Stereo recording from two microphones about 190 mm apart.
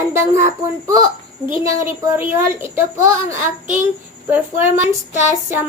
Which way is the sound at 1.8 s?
15° right (ahead or behind).